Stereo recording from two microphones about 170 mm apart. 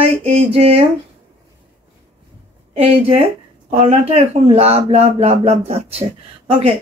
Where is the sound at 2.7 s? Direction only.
35° right (ahead or behind).